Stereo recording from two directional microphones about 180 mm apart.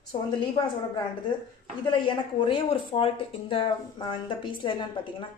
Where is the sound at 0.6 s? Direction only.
25° left (ahead or behind).